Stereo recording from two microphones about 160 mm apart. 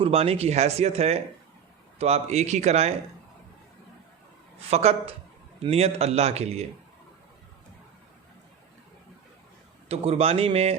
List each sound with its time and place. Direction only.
0.0 s a man's voice: 40° right (ahead or behind)
4.7 s speech: 40° right (ahead or behind)
9.9 s speech: 40° right (ahead or behind)